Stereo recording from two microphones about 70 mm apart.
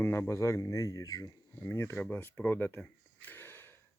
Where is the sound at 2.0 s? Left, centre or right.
Left.